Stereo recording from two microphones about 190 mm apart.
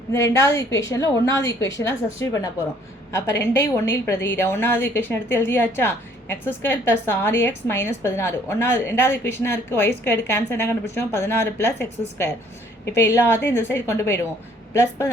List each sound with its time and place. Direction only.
0.1 s a woman's voice: 15° left (ahead or behind)